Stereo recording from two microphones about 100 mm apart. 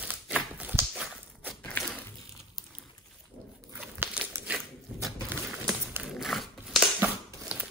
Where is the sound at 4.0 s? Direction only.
20° right (ahead or behind).